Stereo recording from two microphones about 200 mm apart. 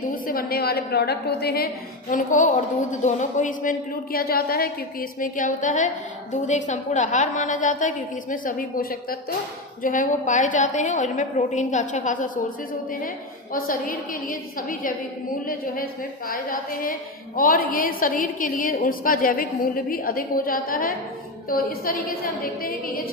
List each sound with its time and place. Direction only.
0.3 s a woman's voice: 45° left (ahead or behind)